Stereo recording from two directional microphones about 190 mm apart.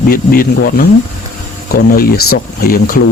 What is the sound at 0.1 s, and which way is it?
Speech, 50° left (ahead or behind).